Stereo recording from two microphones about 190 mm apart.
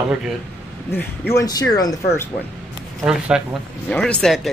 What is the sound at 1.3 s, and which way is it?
Speech, 20° left (ahead or behind).